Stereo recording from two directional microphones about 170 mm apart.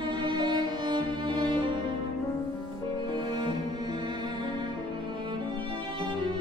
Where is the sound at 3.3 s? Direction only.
25° right (ahead or behind).